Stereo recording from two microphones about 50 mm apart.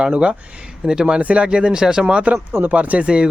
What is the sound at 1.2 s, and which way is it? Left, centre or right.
Speech, right.